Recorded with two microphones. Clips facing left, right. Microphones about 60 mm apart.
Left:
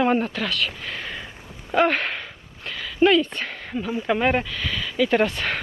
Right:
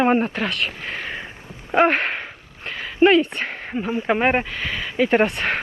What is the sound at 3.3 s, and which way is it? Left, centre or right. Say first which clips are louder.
Speech: right 3 dB; right.